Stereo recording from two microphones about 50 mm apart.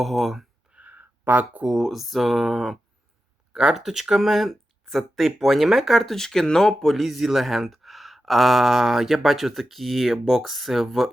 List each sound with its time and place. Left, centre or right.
0.0 s speech: centre
0.7 s a sound: right
1.2 s speech: right
1.7 s speech: centre
3.5 s speech: centre
6.0 s speech: centre
6.9 s speech: centre